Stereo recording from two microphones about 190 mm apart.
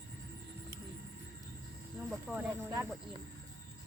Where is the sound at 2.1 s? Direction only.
5° right (ahead or behind).